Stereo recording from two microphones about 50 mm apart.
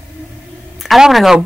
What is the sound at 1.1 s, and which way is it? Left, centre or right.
Speech, centre.